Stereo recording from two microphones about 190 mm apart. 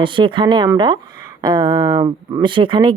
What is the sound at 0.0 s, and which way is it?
Speech, 25° right (ahead or behind).